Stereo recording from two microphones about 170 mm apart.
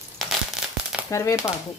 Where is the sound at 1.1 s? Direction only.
20° left (ahead or behind).